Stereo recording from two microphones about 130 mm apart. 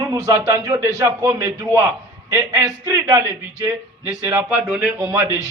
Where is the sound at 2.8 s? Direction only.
25° right (ahead or behind).